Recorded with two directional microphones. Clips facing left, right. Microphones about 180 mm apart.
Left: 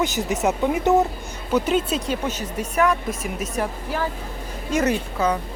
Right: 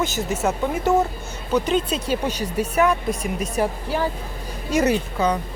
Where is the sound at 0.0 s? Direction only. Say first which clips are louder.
Left 1 dB; 15° left (ahead or behind).